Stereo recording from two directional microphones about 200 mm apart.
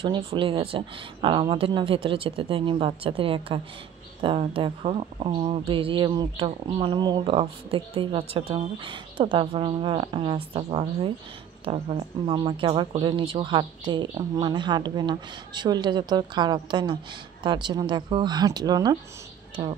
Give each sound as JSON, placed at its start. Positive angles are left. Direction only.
{"t": 0.0, "sound": "speech", "side_deg": -25}